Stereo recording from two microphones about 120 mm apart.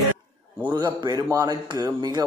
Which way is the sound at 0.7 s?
35° right (ahead or behind).